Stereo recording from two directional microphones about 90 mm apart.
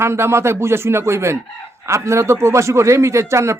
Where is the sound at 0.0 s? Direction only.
30° right (ahead or behind).